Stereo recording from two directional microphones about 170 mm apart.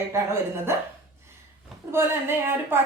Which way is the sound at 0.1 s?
15° right (ahead or behind).